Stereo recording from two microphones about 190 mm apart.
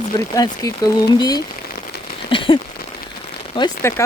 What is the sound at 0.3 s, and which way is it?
Speech, 20° left (ahead or behind).